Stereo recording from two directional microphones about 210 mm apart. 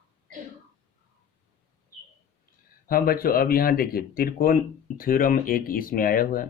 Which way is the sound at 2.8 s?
45° left (ahead or behind).